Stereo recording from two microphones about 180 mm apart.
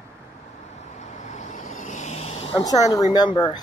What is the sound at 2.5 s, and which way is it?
A woman's voice, 20° left (ahead or behind).